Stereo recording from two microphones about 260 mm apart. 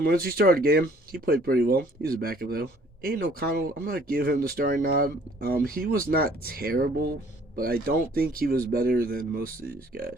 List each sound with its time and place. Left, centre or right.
0.0 s speech: right